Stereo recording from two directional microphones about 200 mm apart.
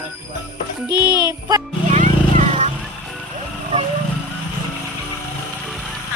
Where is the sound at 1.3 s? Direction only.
20° right (ahead or behind).